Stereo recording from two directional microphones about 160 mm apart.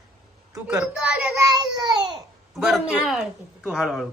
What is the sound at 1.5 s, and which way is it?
Speech, 25° right (ahead or behind).